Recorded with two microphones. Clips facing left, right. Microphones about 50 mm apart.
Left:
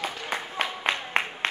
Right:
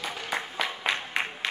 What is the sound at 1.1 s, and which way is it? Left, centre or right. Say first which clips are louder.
Applause: left 3 dB; left.